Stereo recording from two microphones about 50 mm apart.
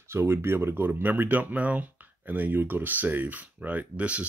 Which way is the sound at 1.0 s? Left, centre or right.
Right.